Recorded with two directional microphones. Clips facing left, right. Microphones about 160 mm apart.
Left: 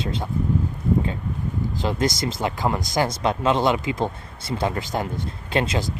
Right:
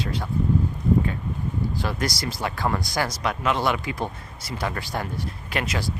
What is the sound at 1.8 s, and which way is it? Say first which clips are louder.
Speech: left 4 dB; 20° left (ahead or behind).